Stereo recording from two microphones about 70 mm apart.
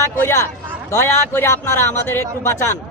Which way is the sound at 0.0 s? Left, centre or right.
Left.